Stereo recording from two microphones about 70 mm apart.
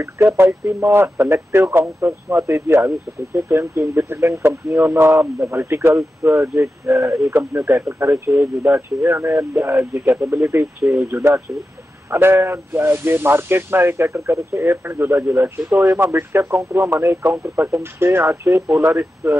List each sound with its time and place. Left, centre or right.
0.0 s speech: right
7.3 s speech: right